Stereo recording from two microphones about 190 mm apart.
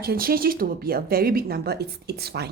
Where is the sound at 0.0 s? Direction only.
55° right (ahead or behind).